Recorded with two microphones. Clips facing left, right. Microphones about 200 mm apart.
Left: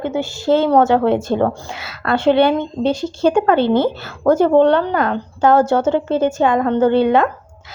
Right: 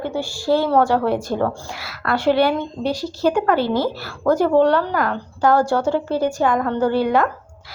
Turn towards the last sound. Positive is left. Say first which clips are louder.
# left 4 dB
turn(degrees=25)  # may be behind; listen again after turning